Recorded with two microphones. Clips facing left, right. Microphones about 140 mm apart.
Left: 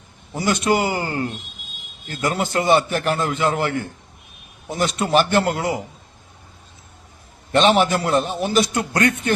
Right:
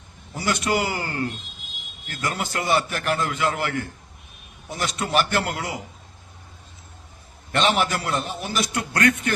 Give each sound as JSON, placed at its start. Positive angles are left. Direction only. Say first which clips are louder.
{"t": 0.3, "sound": "a man's voice", "louder": "left 4 dB", "side_deg": 25}
{"t": 7.5, "sound": "a man's voice", "louder": "left 6 dB", "side_deg": 20}